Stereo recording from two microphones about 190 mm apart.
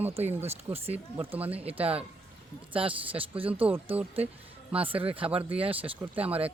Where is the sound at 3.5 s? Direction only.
10° right (ahead or behind).